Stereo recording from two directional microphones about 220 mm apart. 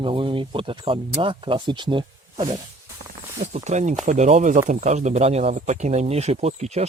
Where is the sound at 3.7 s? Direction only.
30° right (ahead or behind).